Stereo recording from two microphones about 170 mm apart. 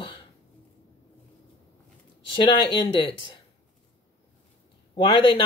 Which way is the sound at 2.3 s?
30° left (ahead or behind).